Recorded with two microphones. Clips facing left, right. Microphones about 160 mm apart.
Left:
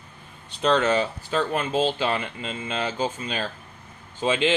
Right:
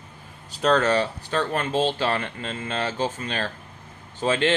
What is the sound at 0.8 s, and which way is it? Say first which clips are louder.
Speech: even; 20° left (ahead or behind).